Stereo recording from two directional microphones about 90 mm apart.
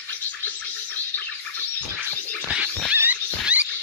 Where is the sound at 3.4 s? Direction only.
15° right (ahead or behind).